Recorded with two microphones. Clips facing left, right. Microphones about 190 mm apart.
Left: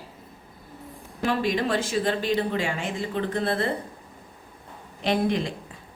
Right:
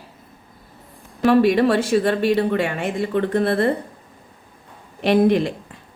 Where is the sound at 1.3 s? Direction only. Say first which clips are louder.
Right 10 dB; 65° right (ahead or behind).